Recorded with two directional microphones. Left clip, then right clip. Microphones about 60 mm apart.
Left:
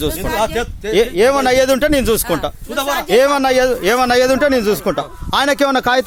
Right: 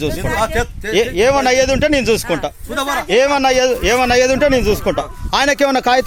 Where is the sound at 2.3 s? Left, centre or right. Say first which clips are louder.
Even; left.